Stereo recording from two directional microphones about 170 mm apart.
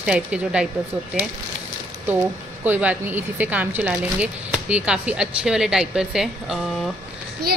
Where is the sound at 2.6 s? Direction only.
10° right (ahead or behind).